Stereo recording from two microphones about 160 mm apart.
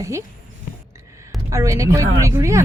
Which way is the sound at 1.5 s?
20° right (ahead or behind).